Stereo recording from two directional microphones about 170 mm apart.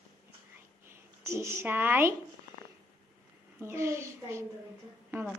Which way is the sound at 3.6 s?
15° right (ahead or behind).